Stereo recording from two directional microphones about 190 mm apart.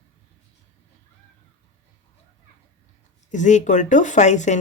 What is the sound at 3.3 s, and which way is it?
Speech, 40° left (ahead or behind).